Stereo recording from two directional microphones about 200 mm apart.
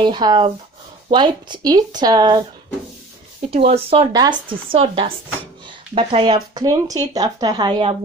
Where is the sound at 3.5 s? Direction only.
30° right (ahead or behind).